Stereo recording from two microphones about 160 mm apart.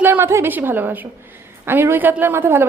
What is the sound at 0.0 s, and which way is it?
A woman's voice, 15° right (ahead or behind).